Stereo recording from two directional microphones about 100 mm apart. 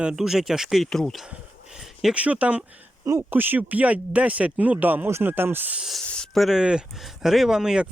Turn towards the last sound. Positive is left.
turn(degrees=-5)  # may be behind; listen again after turning